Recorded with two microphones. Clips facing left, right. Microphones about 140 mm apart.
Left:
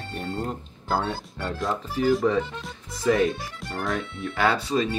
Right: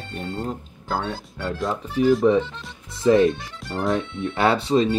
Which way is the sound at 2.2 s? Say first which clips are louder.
Right 5 dB; 20° right (ahead or behind).